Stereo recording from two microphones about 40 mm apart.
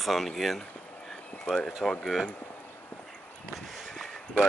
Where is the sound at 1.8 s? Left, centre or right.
Centre.